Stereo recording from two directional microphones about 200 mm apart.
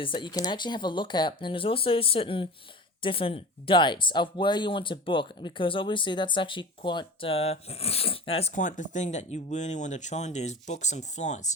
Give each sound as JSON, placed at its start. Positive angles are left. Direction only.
{"t": 0.0, "sound": "speech", "side_deg": 25}